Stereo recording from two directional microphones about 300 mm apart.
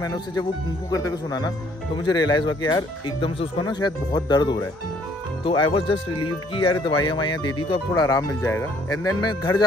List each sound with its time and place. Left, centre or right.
0.0 s speech: centre